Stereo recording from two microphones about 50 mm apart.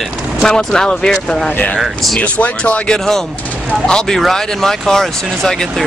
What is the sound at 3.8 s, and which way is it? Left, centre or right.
Speech, centre.